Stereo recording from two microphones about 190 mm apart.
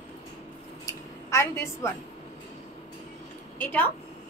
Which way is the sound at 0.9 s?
15° left (ahead or behind).